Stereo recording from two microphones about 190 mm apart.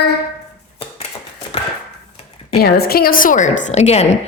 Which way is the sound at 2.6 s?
55° left (ahead or behind).